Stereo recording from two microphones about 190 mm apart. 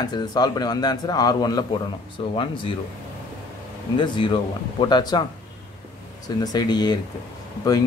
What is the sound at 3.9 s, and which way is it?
A man's voice, 25° left (ahead or behind).